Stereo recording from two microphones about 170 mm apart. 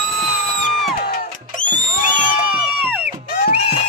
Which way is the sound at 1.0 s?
60° left (ahead or behind).